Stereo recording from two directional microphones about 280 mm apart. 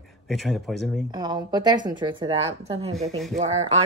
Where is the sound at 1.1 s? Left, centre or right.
Centre.